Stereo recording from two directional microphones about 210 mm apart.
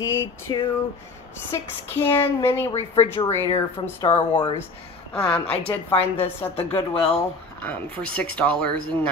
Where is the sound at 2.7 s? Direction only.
25° left (ahead or behind).